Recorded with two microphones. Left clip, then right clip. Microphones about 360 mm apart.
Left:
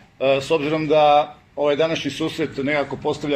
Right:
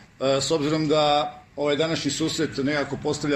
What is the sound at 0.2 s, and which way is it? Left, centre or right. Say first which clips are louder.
Speech: left 4 dB; left.